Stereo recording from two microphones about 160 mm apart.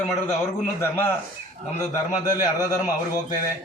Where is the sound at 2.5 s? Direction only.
20° left (ahead or behind).